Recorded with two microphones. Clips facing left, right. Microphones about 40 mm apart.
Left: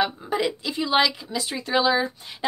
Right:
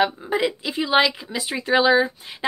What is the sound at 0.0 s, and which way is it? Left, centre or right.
A woman's voice, centre.